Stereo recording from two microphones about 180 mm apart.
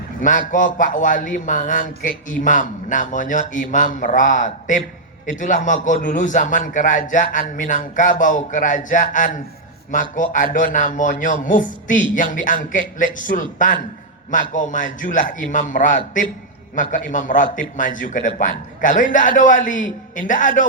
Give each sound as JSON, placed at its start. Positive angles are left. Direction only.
{"t": 0.2, "sound": "a man's voice", "side_deg": 45}